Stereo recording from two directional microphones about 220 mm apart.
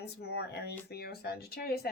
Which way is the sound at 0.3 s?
50° left (ahead or behind).